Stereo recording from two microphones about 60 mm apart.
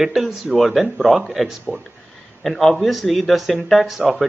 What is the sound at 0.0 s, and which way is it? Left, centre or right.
Speech, centre.